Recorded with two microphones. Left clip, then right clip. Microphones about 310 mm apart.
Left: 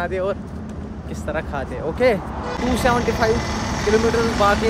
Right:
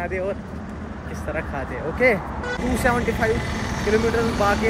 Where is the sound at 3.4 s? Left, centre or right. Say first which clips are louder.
Left 3 dB; left.